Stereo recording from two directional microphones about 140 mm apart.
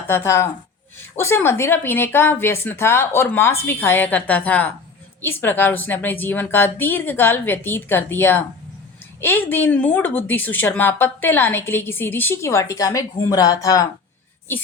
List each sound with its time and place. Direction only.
0.1 s a woman's voice: 20° left (ahead or behind)